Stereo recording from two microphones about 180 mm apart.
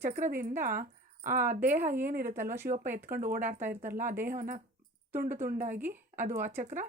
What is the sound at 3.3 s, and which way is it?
A woman's voice, 45° right (ahead or behind).